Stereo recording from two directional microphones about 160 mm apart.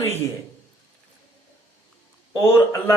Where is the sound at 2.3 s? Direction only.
15° left (ahead or behind).